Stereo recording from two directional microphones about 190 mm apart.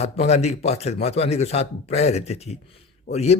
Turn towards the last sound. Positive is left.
turn(degrees=55)  # may be behind; listen again after turning